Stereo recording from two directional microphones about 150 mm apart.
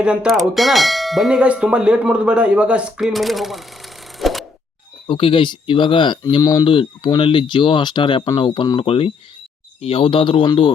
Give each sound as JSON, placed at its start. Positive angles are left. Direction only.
{"t": 0.0, "sound": "bell", "side_deg": -5}
{"t": 5.0, "sound": "speech", "side_deg": 35}